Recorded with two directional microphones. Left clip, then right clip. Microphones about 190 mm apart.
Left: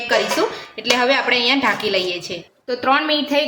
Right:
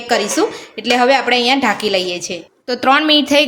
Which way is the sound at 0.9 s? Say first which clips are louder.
Right 4 dB; 50° right (ahead or behind).